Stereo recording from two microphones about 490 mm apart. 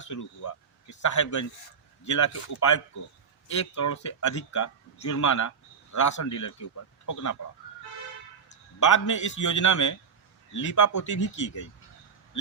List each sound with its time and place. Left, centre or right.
0.0 s speech: left
8.8 s speech: left